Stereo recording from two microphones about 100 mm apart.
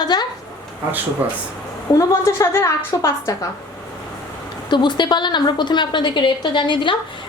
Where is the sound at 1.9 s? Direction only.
30° left (ahead or behind).